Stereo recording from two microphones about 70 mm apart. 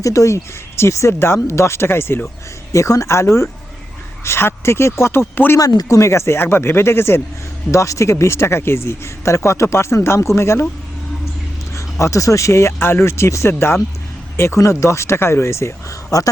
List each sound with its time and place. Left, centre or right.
0.0 s speech: left
2.7 s speech: left
5.5 s speech: left
7.7 s speech: left
11.7 s speech: left